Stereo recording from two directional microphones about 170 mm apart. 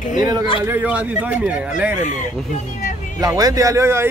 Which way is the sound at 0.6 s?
10° right (ahead or behind).